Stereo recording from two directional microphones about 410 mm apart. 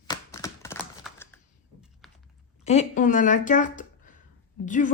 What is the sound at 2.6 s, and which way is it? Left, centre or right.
Speech, centre.